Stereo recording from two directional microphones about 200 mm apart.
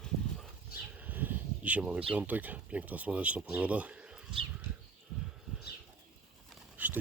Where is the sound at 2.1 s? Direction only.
10° right (ahead or behind).